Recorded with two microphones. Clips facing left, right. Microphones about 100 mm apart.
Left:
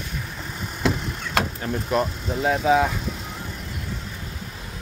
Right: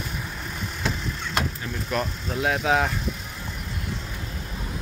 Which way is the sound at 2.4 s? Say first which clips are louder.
Left 3 dB; centre (ahead or behind).